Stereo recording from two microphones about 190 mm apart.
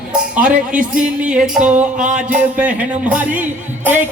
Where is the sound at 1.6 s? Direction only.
40° right (ahead or behind).